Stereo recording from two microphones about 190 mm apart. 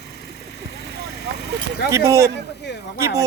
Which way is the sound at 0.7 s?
60° left (ahead or behind).